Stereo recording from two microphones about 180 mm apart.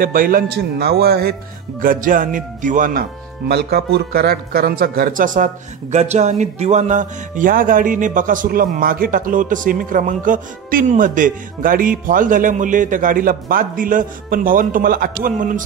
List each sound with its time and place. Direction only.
0.0 s a man's voice: 50° right (ahead or behind)
1.8 s speech: 50° right (ahead or behind)